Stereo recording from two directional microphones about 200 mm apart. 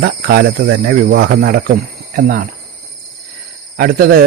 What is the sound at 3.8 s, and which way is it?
Speech, 50° right (ahead or behind).